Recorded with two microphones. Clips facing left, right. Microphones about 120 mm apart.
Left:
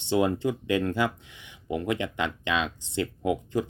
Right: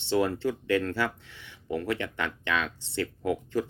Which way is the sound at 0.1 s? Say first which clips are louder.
Left 2 dB; 20° left (ahead or behind).